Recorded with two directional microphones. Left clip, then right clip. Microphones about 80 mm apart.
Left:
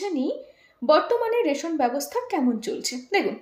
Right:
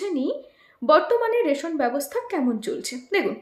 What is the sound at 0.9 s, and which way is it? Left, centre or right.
A woman's voice, right.